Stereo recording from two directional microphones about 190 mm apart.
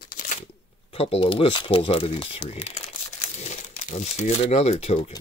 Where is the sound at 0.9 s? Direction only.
30° left (ahead or behind).